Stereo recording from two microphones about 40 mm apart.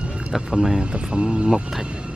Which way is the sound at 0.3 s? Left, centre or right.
Centre.